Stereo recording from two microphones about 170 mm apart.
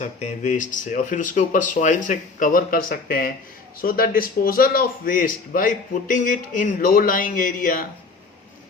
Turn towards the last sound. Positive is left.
turn(degrees=55)  # may be behind; listen again after turning